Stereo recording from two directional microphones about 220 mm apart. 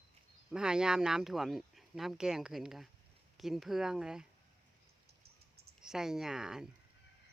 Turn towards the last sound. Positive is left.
turn(degrees=0)  # may be behind; listen again after turning